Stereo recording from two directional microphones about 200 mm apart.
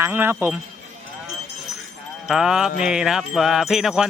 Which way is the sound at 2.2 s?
Centre (ahead or behind).